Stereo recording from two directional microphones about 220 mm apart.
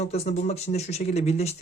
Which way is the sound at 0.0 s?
30° left (ahead or behind).